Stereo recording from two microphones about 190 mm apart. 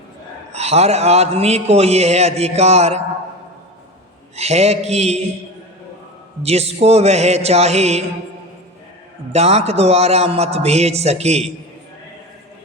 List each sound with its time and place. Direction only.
0.5 s a man's voice: 35° right (ahead or behind)
4.4 s a man's voice: 35° right (ahead or behind)
6.4 s a man's voice: 35° right (ahead or behind)
9.3 s a man's voice: 35° right (ahead or behind)